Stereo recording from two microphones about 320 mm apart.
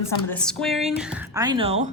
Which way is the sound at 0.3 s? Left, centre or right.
Centre.